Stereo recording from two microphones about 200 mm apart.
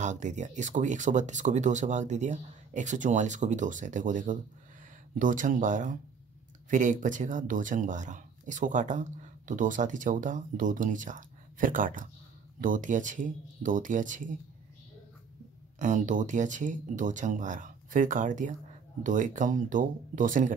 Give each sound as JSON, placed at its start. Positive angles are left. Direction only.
{"t": 0.0, "sound": "speech", "side_deg": -35}
{"t": 15.8, "sound": "speech", "side_deg": -40}